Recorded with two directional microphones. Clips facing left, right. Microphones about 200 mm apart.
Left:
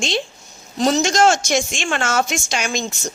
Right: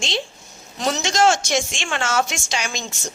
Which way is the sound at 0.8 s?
35° left (ahead or behind).